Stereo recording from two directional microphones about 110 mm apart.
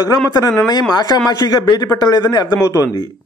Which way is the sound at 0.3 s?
35° left (ahead or behind).